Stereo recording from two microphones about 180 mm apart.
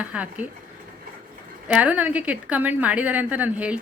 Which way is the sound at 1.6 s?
10° right (ahead or behind).